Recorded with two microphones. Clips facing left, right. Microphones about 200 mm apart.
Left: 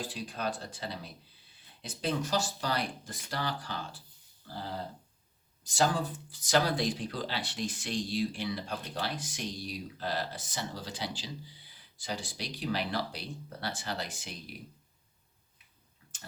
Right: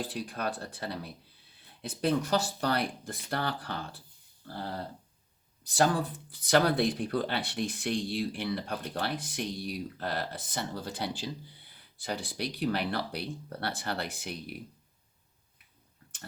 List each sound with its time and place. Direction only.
0.0 s speech: 55° right (ahead or behind)